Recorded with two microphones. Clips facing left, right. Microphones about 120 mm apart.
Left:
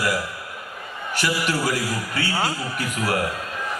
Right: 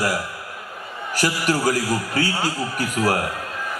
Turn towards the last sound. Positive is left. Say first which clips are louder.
# right 3 dB
turn(degrees=-40)  # may be behind; listen again after turning